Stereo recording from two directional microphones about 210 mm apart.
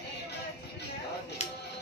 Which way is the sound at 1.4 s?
30° left (ahead or behind).